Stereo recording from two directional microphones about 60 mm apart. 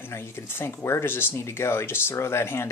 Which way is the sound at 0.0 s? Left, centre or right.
Left.